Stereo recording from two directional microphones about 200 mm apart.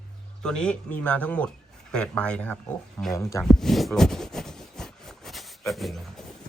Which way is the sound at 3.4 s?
Centre (ahead or behind).